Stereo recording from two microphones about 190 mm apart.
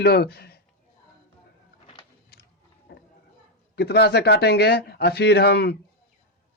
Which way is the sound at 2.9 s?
60° left (ahead or behind).